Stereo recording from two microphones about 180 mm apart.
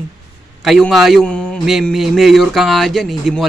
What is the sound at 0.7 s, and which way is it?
A man's voice, centre (ahead or behind).